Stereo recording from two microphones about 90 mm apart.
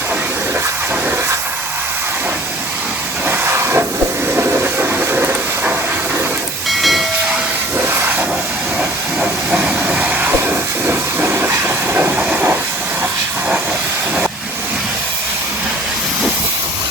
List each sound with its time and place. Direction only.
3.2 s hiss: 30° right (ahead or behind)
4.4 s train: 25° right (ahead or behind)
6.7 s hiss: centre (ahead or behind)
7.8 s vehicle: 25° right (ahead or behind)
8.8 s hiss: 10° right (ahead or behind)
11.6 s train: 25° right (ahead or behind)